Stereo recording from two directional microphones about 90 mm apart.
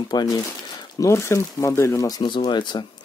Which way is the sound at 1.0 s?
30° left (ahead or behind).